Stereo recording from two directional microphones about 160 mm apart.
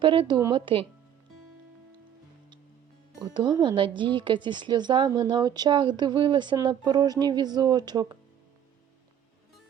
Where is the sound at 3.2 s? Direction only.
25° right (ahead or behind).